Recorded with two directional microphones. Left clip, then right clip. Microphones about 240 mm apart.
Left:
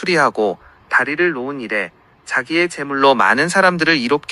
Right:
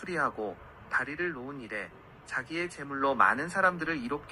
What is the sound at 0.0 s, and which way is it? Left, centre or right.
Speech, left.